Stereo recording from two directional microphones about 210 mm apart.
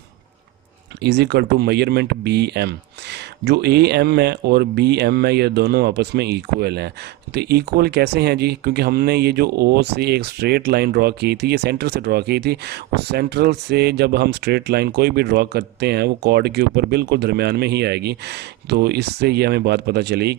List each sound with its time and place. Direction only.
1.0 s speech: 55° right (ahead or behind)